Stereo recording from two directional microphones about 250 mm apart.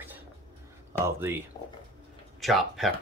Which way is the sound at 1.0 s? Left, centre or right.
Centre.